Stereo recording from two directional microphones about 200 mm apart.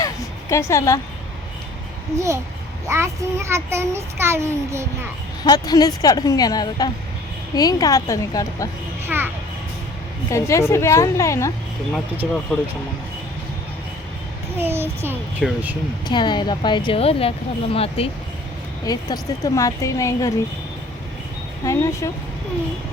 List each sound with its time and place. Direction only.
0.5 s a woman's voice: 15° left (ahead or behind)
2.1 s a child's voice: 15° right (ahead or behind)
5.4 s a woman's voice: 20° left (ahead or behind)
9.0 s a child's voice: 10° right (ahead or behind)
10.2 s a woman's voice: 15° left (ahead or behind)
11.9 s a child's voice: 10° right (ahead or behind)
14.6 s a child's voice: 10° right (ahead or behind)
15.4 s speech: centre (ahead or behind)
16.0 s a woman's voice: 20° left (ahead or behind)
21.6 s a woman's voice: 15° left (ahead or behind)